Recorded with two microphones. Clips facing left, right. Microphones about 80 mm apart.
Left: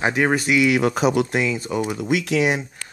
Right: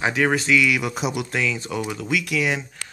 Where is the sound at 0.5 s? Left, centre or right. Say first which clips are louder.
Left 2 dB; left.